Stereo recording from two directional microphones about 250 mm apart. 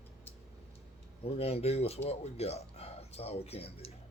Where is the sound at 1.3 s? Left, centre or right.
Left.